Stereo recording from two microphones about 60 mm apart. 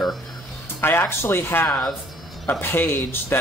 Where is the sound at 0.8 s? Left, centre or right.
Left.